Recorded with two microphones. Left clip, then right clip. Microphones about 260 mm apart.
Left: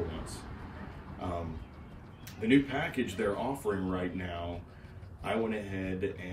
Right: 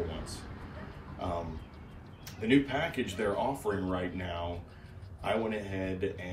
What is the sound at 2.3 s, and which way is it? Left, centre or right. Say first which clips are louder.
Speech: even; centre.